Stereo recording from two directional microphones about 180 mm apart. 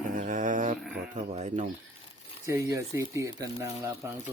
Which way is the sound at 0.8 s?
Centre (ahead or behind).